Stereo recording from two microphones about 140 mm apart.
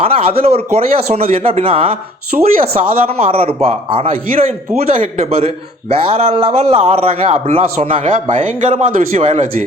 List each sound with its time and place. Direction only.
0.0 s a man's voice: 45° right (ahead or behind)
2.3 s speech: 65° right (ahead or behind)
3.1 s a man's voice: 40° right (ahead or behind)
8.0 s speech: 65° right (ahead or behind)